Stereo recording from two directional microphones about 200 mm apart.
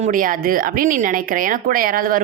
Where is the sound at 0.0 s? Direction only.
40° right (ahead or behind).